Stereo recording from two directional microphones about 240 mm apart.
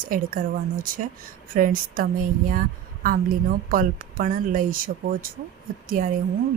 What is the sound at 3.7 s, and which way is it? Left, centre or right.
A woman's voice, right.